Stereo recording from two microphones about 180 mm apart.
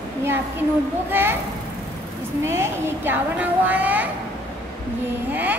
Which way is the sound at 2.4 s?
15° right (ahead or behind).